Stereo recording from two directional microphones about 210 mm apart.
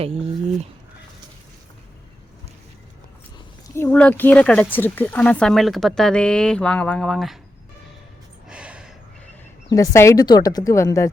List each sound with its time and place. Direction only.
0.0 s speech: 30° right (ahead or behind)
3.8 s speech: 10° left (ahead or behind)
8.4 s gasp: 5° right (ahead or behind)
9.6 s speech: 15° left (ahead or behind)